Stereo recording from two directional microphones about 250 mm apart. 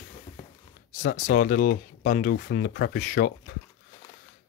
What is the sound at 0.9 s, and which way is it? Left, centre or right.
Speech, left.